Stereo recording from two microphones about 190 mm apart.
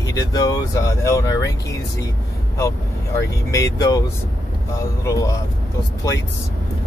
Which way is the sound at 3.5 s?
15° left (ahead or behind).